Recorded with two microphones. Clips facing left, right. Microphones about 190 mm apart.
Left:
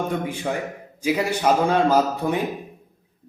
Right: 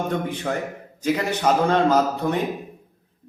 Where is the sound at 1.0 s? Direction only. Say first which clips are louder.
Left 1 dB; 10° left (ahead or behind).